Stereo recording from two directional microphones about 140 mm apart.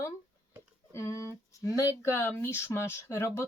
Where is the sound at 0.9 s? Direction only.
20° left (ahead or behind).